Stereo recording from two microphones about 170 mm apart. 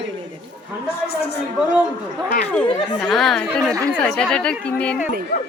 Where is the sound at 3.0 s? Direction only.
Centre (ahead or behind).